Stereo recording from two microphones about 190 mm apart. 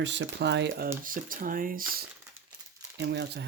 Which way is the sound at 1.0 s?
45° right (ahead or behind).